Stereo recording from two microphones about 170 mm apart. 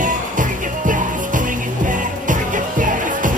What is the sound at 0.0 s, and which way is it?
Music, 50° right (ahead or behind).